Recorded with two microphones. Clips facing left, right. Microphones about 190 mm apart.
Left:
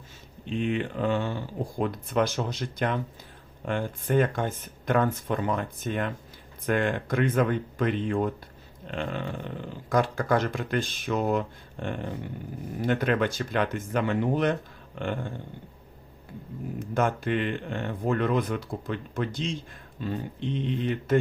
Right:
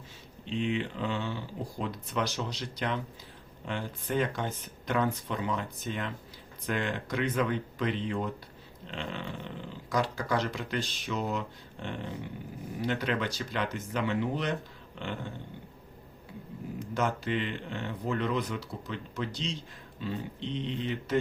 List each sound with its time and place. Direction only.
0.4 s speech: 50° left (ahead or behind)
16.9 s speech: 55° left (ahead or behind)